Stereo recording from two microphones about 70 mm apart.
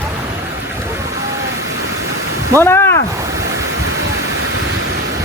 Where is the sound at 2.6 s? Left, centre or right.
Left.